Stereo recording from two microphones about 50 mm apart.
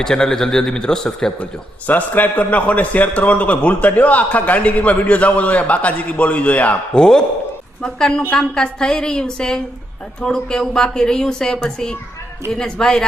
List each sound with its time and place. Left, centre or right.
0.0 s a man's voice: centre
1.9 s a man's voice: left
6.9 s a man's voice: centre